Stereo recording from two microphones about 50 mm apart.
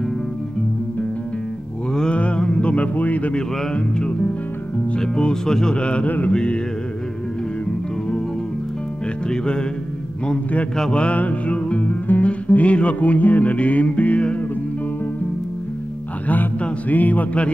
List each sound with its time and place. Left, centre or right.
1.9 s a sound: centre
3.3 s speech: centre
5.8 s speech: left
9.3 s speech: centre
10.8 s music: left
16.3 s a sound: left